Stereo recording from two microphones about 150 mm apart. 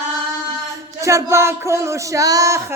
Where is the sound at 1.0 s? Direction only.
20° right (ahead or behind).